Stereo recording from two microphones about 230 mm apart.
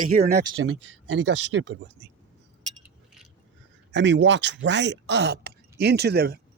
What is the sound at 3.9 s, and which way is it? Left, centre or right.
Speech, right.